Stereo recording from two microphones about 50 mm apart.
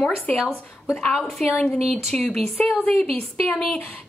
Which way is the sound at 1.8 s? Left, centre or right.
Centre.